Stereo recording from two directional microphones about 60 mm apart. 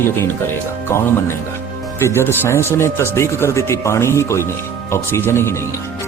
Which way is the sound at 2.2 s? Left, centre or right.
Left.